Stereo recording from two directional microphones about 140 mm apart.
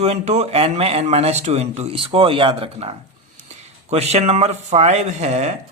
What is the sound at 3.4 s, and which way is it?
Speech, 50° right (ahead or behind).